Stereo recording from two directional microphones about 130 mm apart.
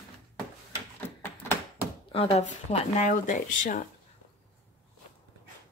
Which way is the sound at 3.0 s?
75° left (ahead or behind).